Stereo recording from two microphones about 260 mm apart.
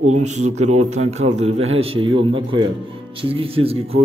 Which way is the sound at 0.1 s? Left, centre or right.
Right.